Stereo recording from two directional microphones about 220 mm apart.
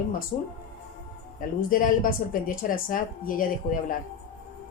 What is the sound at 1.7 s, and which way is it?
A woman's voice, 40° left (ahead or behind).